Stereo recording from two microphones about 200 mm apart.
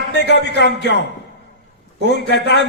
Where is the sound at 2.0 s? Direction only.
60° left (ahead or behind).